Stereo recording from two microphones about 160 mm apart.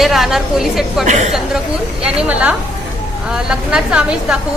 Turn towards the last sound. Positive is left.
turn(degrees=-5)  # may be behind; listen again after turning